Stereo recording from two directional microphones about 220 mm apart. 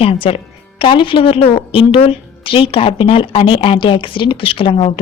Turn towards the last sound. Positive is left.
turn(degrees=25)  # may be behind; listen again after turning